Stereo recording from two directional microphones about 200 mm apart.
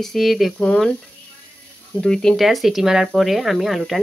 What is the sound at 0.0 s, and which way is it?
Speech, centre (ahead or behind).